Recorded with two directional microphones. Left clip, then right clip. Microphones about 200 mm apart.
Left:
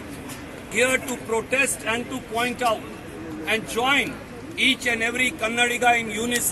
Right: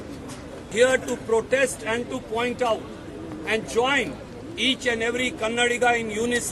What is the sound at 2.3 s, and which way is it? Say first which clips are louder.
A man's voice: left 1 dB; 30° right (ahead or behind).